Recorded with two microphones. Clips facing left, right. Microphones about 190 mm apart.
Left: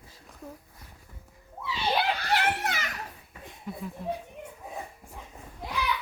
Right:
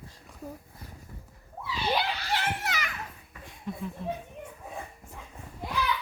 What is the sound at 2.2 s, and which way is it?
Children playing, 55° left (ahead or behind).